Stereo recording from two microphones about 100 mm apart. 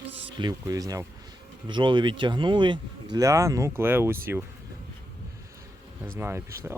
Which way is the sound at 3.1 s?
30° right (ahead or behind).